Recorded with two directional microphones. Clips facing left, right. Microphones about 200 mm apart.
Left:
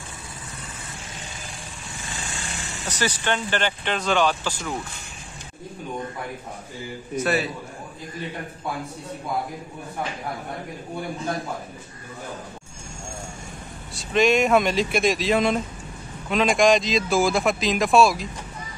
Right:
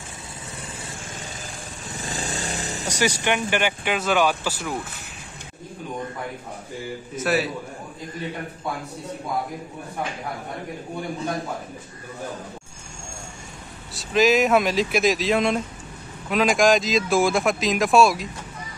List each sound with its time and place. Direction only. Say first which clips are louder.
2.0 s vehicle: right 7 dB; 40° right (ahead or behind)
2.9 s speech: right 2 dB; 10° right (ahead or behind)
7.2 s speech: even; centre (ahead or behind)
13.9 s speech: right 1 dB; centre (ahead or behind)